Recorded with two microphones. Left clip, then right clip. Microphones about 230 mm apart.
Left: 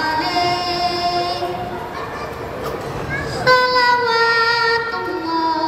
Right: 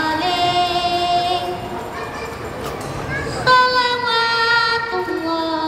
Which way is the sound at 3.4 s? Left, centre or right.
Centre.